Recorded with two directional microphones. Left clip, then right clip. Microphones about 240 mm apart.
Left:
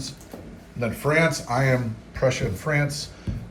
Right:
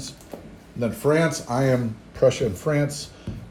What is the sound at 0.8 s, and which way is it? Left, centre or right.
Speech, centre.